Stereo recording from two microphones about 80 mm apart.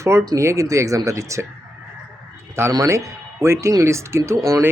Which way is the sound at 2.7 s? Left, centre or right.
Right.